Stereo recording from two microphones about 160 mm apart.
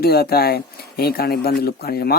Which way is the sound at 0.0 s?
75° left (ahead or behind).